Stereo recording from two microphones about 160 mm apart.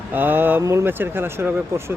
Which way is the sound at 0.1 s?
10° right (ahead or behind).